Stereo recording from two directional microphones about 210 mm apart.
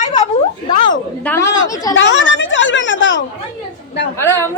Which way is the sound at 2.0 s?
60° left (ahead or behind).